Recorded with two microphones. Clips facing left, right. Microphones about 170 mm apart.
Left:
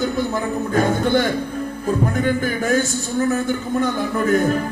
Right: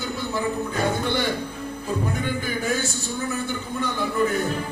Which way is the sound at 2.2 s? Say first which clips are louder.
Left 6 dB; 50° left (ahead or behind).